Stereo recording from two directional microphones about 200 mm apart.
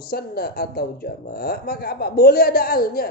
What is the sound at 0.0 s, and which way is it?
Speech, 50° left (ahead or behind).